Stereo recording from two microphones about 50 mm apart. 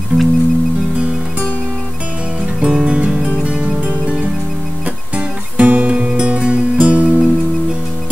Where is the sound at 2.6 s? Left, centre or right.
Centre.